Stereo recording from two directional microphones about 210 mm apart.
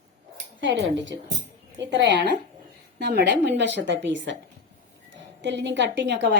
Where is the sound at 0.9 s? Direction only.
60° right (ahead or behind).